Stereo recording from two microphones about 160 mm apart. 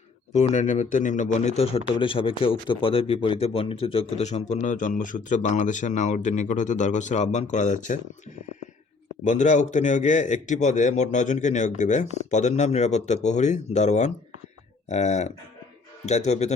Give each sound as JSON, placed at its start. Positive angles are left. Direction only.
{"t": 0.3, "sound": "speech", "side_deg": 45}
{"t": 9.2, "sound": "speech", "side_deg": 50}